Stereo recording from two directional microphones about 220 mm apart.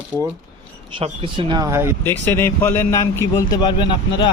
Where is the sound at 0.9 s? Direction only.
20° right (ahead or behind).